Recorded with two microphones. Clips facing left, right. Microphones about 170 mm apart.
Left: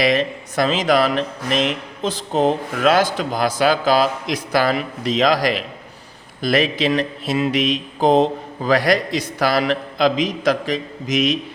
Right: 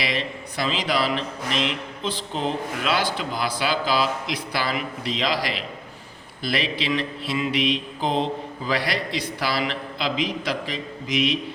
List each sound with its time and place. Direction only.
0.0 s speech: 45° left (ahead or behind)